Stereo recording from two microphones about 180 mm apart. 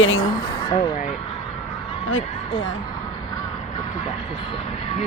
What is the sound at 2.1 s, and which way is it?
Speech, 80° left.